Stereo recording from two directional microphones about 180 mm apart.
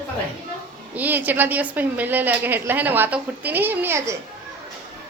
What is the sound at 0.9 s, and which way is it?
A woman's voice, 10° right (ahead or behind).